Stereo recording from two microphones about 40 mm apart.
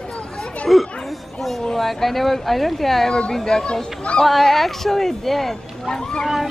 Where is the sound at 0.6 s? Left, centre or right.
Centre.